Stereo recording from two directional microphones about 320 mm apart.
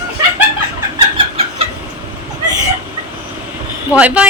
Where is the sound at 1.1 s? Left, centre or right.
Centre.